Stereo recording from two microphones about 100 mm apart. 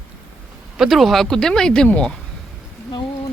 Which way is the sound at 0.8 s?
Centre (ahead or behind).